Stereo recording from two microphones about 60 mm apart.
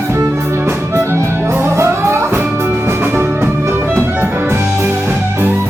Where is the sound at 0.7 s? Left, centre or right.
Right.